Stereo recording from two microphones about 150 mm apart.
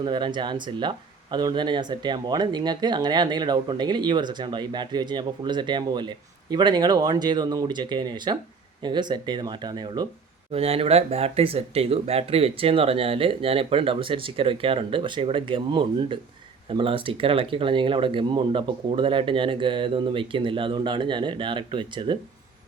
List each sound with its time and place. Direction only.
0.0 s speech: 30° right (ahead or behind)
10.5 s speech: 40° right (ahead or behind)